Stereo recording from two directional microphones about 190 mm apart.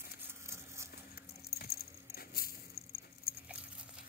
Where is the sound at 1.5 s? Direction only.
55° left (ahead or behind).